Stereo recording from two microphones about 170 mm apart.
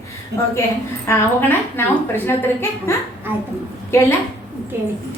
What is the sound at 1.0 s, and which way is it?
A woman's voice, 15° left (ahead or behind).